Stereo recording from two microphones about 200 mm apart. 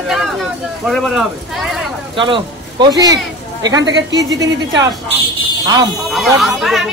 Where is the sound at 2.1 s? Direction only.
25° right (ahead or behind).